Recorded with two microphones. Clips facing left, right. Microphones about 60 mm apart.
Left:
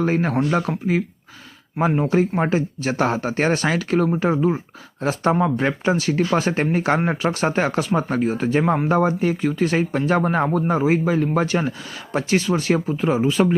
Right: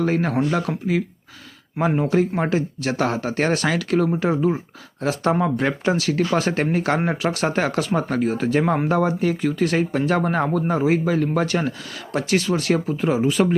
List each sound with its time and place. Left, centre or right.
0.0 s speech: centre
9.0 s speech: left
9.4 s speech: centre